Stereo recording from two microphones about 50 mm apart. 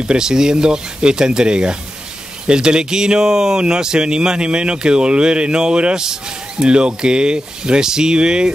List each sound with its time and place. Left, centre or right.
0.0 s speech: centre